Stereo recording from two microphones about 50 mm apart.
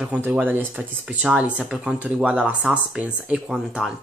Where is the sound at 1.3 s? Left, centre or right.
Right.